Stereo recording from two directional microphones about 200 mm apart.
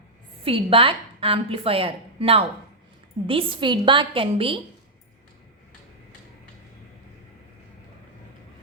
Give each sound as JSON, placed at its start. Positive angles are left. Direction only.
{"t": 0.4, "sound": "a woman's voice", "side_deg": -25}